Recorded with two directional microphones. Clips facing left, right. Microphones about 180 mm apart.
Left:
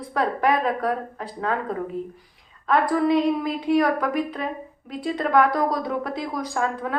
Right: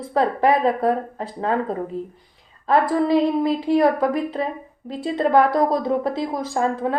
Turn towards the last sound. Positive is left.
turn(degrees=-30)  # may be behind; listen again after turning